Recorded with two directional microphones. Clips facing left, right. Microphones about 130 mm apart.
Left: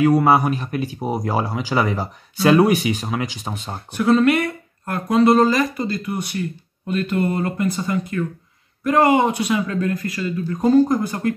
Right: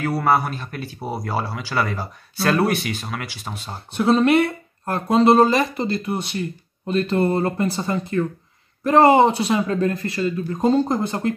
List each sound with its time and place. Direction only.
0.0 s speech: 15° left (ahead or behind)
3.9 s speech: 30° right (ahead or behind)